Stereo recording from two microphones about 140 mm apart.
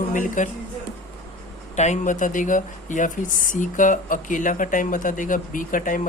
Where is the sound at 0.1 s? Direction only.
65° left (ahead or behind).